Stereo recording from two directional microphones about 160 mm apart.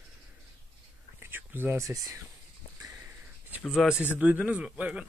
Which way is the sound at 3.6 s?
Centre (ahead or behind).